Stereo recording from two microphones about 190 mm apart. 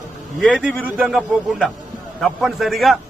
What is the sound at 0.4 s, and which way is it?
A man's voice, 5° right (ahead or behind).